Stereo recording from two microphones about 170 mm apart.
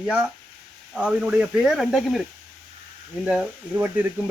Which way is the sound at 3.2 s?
5° right (ahead or behind).